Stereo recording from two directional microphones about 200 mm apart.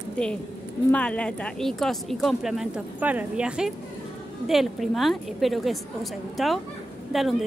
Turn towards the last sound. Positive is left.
turn(degrees=0)  # may be behind; listen again after turning